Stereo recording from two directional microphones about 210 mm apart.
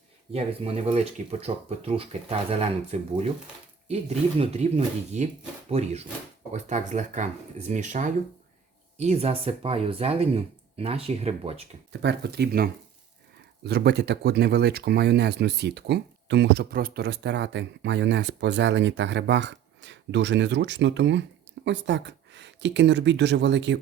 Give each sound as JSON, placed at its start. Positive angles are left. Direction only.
{"t": 0.3, "sound": "speech", "side_deg": -30}
{"t": 4.4, "sound": "speech", "side_deg": -30}
{"t": 11.9, "sound": "speech", "side_deg": -55}